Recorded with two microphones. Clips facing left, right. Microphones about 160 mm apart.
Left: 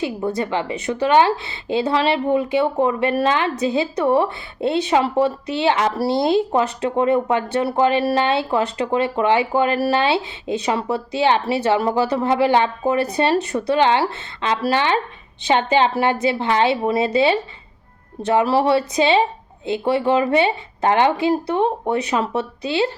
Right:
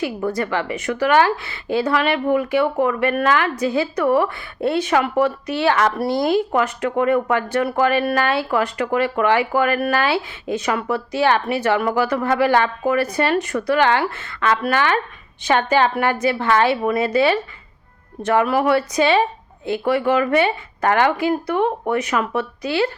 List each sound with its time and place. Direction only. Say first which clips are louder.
0.0 s speech: even; 20° left (ahead or behind)
18.4 s speech: left 1 dB; 30° left (ahead or behind)